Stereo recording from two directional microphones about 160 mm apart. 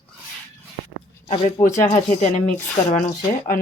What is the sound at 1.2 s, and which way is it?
Speech, 35° left (ahead or behind).